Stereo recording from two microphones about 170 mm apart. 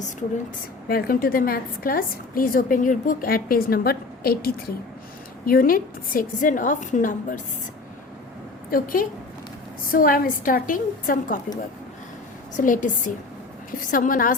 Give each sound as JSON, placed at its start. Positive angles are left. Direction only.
{"t": 0.9, "sound": "a woman's voice", "side_deg": 60}
{"t": 8.7, "sound": "a woman's voice", "side_deg": 55}
{"t": 12.5, "sound": "a woman's voice", "side_deg": 50}